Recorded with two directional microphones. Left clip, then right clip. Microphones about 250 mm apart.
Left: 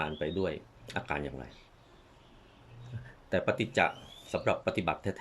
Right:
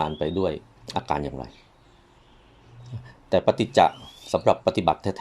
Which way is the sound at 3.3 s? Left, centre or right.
Centre.